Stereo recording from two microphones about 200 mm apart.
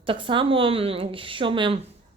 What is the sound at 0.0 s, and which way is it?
Speech, 25° right (ahead or behind).